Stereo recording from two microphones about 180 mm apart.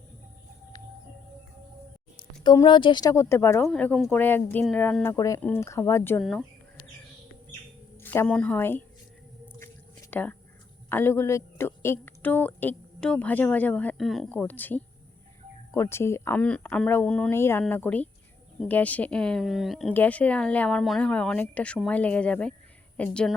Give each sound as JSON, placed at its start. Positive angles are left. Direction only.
{"t": 2.4, "sound": "a woman's voice", "side_deg": 25}
{"t": 8.0, "sound": "a woman's voice", "side_deg": 10}
{"t": 9.6, "sound": "a sound", "side_deg": 10}
{"t": 10.8, "sound": "a woman's voice", "side_deg": 10}